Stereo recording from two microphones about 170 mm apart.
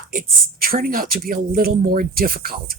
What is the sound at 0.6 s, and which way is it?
Speech, 60° right (ahead or behind).